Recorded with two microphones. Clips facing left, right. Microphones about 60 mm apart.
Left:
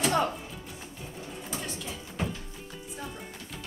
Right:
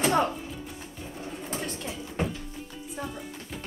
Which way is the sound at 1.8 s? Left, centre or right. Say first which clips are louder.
Right 3 dB; centre.